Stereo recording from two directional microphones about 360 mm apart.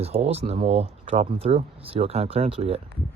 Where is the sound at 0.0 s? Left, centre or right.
Centre.